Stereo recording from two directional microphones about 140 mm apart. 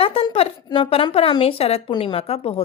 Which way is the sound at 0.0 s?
40° left (ahead or behind).